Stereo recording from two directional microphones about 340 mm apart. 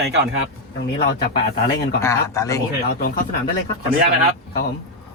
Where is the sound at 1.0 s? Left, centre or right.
Left.